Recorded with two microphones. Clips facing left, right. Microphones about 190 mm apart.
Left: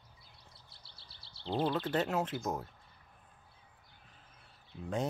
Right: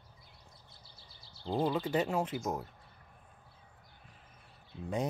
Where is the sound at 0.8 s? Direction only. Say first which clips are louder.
Right 2 dB; 70° left (ahead or behind).